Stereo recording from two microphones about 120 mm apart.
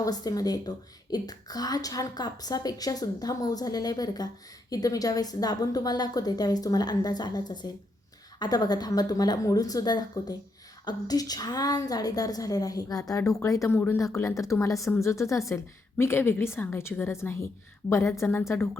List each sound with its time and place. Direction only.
0.0 s a woman's voice: 30° left (ahead or behind)